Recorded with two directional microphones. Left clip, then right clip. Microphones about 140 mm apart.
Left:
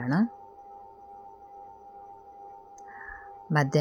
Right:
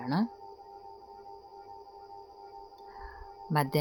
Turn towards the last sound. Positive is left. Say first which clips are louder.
# left 3 dB
turn(degrees=20)  # may be behind; listen again after turning